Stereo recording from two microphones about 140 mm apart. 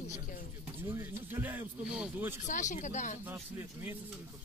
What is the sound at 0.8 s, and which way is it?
Speech, 15° right (ahead or behind).